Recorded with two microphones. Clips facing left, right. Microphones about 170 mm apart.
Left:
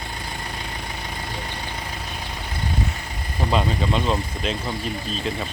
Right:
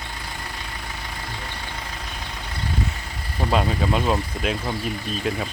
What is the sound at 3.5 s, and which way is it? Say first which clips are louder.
Speech: right 1 dB; 5° right (ahead or behind).